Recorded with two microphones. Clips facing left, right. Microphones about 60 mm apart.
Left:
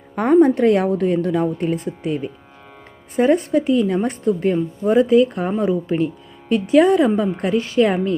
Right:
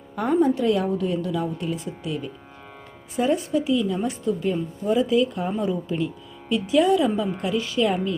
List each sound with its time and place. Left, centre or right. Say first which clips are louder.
0.3 s a woman's voice: left 7 dB; left